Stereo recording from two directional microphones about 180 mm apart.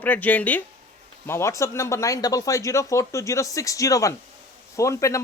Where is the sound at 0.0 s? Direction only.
10° left (ahead or behind).